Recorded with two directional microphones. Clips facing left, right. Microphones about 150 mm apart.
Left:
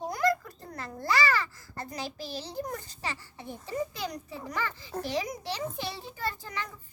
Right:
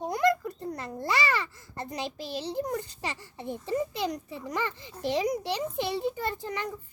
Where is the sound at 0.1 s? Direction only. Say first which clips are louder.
Right 3 dB; 20° right (ahead or behind).